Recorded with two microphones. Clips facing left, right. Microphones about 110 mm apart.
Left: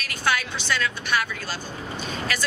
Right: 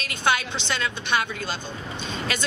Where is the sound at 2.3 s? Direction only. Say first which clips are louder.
Left 1 dB; 20° right (ahead or behind).